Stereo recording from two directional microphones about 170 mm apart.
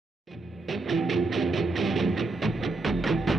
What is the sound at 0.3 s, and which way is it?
Music, centre (ahead or behind).